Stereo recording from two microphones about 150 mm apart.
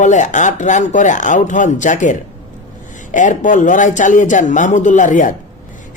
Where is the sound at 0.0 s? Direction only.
55° left (ahead or behind).